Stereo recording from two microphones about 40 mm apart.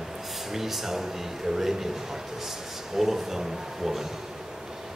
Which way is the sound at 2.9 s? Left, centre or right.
Centre.